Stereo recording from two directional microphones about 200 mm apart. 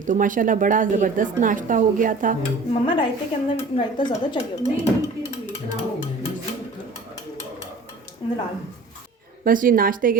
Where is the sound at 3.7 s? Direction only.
30° left (ahead or behind).